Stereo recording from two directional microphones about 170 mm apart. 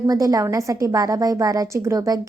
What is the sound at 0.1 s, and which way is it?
A woman's voice, 20° right (ahead or behind).